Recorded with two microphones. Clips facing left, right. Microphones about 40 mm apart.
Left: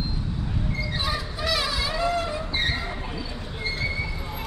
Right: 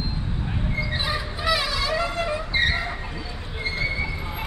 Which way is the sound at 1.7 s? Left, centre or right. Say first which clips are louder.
Right 3 dB; centre.